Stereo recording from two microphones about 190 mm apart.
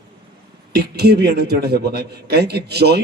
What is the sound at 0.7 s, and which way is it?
A man's voice, 55° right (ahead or behind).